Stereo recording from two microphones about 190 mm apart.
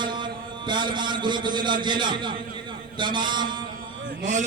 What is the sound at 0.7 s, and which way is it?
A man's voice, 25° right (ahead or behind).